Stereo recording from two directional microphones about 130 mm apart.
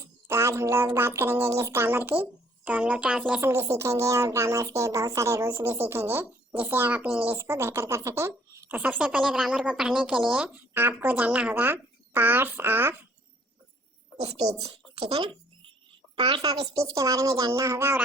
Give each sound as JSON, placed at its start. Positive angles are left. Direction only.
{"t": 0.0, "sound": "a woman's voice", "side_deg": -20}
{"t": 3.4, "sound": "a woman's voice", "side_deg": -20}
{"t": 14.2, "sound": "a woman's voice", "side_deg": -55}
{"t": 16.4, "sound": "a woman's voice", "side_deg": -30}